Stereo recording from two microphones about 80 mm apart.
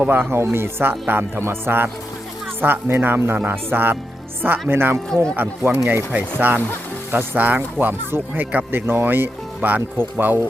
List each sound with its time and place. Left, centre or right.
0.0 s speech: right
5.0 s speech: centre
5.4 s speech: right
6.1 s speech: right